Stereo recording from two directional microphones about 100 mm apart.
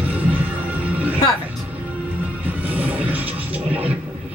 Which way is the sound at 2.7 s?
15° right (ahead or behind).